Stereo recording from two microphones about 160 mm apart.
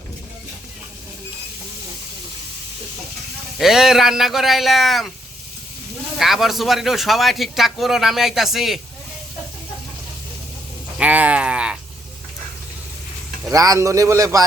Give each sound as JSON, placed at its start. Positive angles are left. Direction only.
{"t": 3.6, "sound": "a man's voice", "side_deg": 0}
{"t": 6.1, "sound": "a man's voice", "side_deg": 0}
{"t": 10.9, "sound": "a sound", "side_deg": -10}
{"t": 13.5, "sound": "a man's voice", "side_deg": -20}